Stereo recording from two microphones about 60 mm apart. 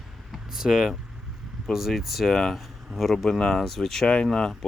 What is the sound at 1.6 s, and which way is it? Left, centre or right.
Speech, centre.